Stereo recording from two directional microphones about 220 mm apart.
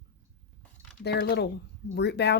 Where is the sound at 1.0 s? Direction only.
50° left (ahead or behind).